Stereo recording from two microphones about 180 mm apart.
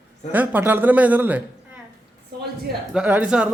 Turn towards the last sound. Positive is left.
turn(degrees=-5)  # may be behind; listen again after turning